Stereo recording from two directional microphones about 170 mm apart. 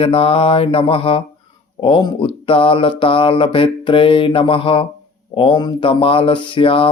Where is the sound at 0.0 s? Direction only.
35° left (ahead or behind).